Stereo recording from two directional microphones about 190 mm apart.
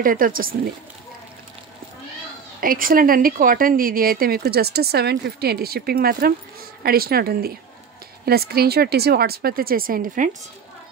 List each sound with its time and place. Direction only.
0.0 s speech: 45° right (ahead or behind)
2.6 s speech: 50° right (ahead or behind)